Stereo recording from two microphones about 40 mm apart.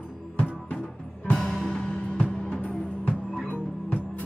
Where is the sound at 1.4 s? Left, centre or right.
Centre.